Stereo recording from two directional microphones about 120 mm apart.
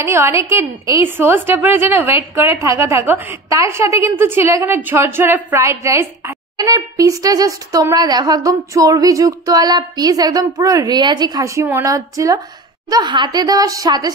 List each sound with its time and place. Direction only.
0.0 s a woman's voice: 20° right (ahead or behind)